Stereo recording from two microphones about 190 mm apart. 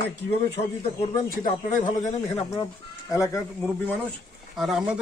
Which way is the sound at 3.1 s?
20° left (ahead or behind).